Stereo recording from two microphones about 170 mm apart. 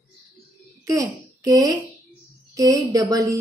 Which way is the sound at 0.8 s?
20° right (ahead or behind).